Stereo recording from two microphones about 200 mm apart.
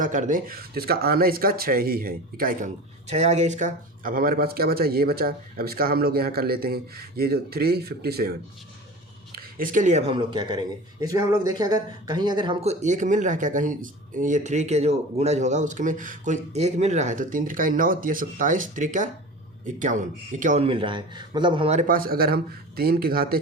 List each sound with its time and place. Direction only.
0.0 s speech: 40° right (ahead or behind)
3.1 s speech: 35° right (ahead or behind)
12.8 s speech: 40° right (ahead or behind)
20.7 s speech: 25° right (ahead or behind); by 23.4 s 50° right (ahead or behind)